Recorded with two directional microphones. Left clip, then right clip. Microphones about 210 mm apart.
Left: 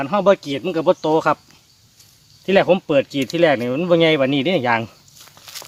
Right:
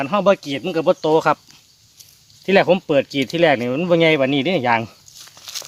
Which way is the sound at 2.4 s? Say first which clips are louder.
Even; 30° right (ahead or behind).